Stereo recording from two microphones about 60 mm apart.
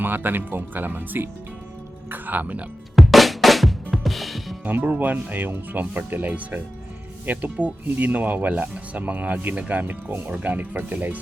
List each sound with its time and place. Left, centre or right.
0.0 s speech: right
2.9 s drum: centre
4.6 s speech: right